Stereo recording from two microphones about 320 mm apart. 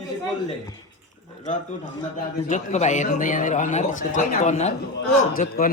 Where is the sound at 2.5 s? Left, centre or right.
Left.